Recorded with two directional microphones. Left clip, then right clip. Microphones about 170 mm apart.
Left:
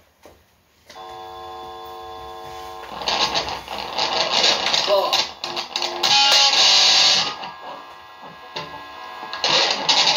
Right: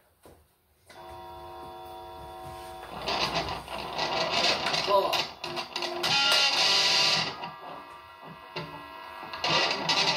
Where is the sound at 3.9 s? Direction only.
25° left (ahead or behind).